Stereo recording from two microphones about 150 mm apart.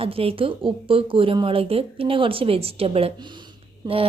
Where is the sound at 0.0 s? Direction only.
40° right (ahead or behind).